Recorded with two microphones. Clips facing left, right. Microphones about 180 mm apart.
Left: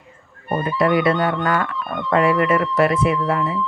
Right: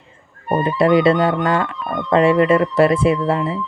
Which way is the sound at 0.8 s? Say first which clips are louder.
Right 4 dB; 25° right (ahead or behind).